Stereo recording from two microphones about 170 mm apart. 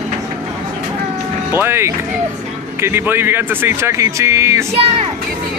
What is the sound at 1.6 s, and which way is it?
Speech, 15° right (ahead or behind).